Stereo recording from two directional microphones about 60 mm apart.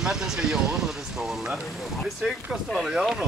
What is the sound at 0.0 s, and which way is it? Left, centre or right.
Speech, centre.